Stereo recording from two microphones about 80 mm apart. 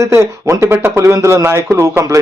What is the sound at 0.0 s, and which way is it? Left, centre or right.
A man's voice, right.